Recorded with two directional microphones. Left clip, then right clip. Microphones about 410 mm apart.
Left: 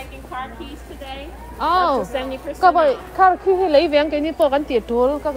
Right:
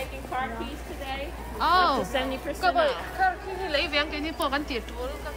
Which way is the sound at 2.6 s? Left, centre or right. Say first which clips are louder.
Left 9 dB; centre.